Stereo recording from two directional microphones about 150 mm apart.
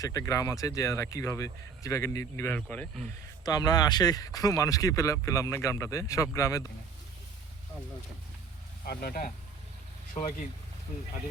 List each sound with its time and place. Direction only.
0.0 s speech: 20° left (ahead or behind)
3.4 s speech: 25° left (ahead or behind)
8.8 s speech: 85° left
10.2 s speech: 55° left (ahead or behind)